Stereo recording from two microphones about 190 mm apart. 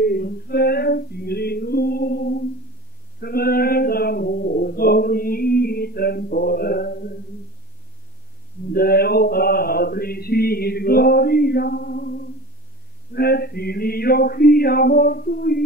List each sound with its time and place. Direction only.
0.0 s a sound: 55° left (ahead or behind)
8.7 s mantra: 55° left (ahead or behind)
13.1 s male singing: 55° left (ahead or behind)